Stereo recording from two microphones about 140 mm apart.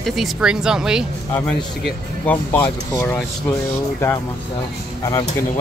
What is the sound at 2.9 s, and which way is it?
Speech, 20° left (ahead or behind).